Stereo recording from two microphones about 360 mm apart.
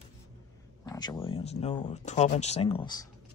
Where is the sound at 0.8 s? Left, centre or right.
Centre.